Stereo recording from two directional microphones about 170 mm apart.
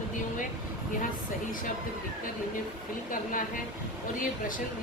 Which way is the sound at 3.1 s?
50° left (ahead or behind).